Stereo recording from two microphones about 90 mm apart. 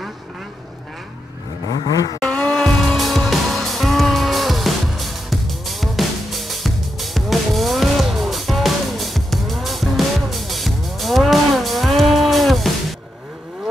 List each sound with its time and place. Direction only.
1.7 s vehicle: 45° left (ahead or behind)
2.1 s music: 5° left (ahead or behind)